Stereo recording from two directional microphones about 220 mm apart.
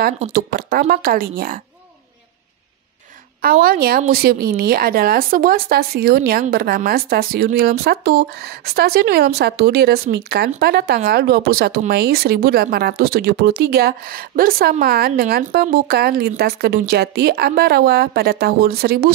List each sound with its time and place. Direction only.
0.3 s a woman's voice: 40° right (ahead or behind)
3.6 s speech: 40° right (ahead or behind)